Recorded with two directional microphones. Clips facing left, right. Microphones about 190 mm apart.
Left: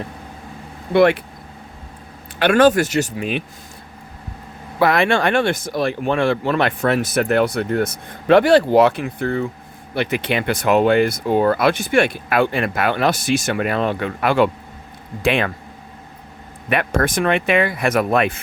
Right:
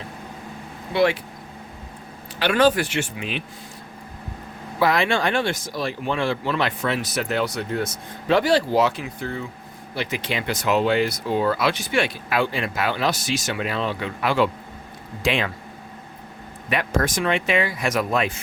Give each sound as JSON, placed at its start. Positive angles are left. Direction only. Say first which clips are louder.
{"t": 0.9, "sound": "speech", "louder": "left 6 dB", "side_deg": 55}
{"t": 2.4, "sound": "speech", "louder": "left 5 dB", "side_deg": 50}
{"t": 4.8, "sound": "speech", "louder": "left 4 dB", "side_deg": 60}
{"t": 16.6, "sound": "speech", "louder": "left 4 dB", "side_deg": 60}